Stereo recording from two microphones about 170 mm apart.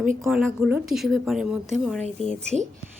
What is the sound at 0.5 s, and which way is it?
Speech, 10° right (ahead or behind).